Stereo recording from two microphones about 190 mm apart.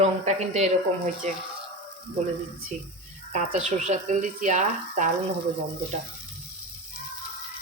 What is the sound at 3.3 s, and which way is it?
A woman's voice, 40° right (ahead or behind).